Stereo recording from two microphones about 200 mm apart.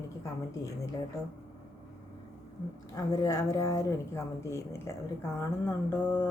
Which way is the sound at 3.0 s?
15° left (ahead or behind).